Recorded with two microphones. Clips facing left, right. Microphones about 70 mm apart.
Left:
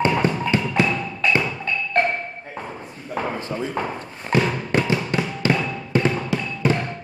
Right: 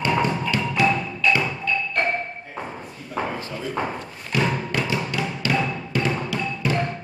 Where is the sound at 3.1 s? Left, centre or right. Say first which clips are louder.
Left 2 dB; left.